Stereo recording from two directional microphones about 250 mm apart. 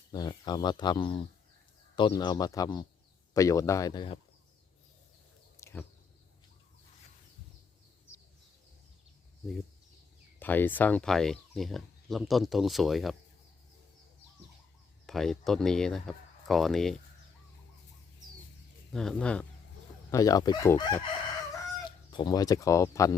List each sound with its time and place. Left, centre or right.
0.1 s speech: centre
5.5 s a sound: centre
10.4 s speech: centre
15.0 s speech: centre
18.9 s speech: centre